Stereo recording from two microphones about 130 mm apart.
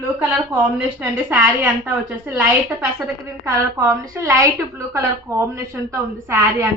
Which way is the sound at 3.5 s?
25° right (ahead or behind).